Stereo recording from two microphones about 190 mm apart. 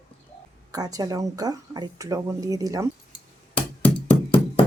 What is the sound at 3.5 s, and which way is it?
Music, 5° left (ahead or behind).